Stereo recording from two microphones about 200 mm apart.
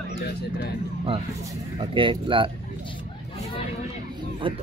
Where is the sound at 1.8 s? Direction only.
25° right (ahead or behind).